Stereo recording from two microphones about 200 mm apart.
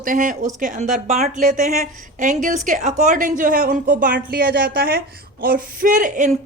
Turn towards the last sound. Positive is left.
turn(degrees=-40)  # may be behind; listen again after turning